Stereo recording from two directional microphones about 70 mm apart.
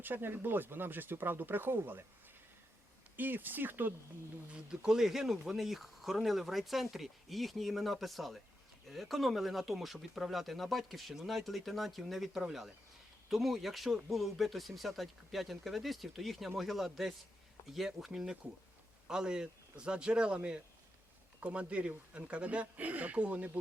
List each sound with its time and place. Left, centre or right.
0.0 s speech: right
3.2 s speech: right
4.5 s speech: centre